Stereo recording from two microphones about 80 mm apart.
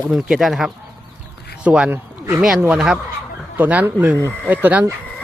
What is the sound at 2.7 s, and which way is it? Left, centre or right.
Speech, centre.